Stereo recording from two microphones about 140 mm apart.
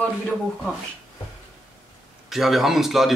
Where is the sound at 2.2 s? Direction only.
Centre (ahead or behind).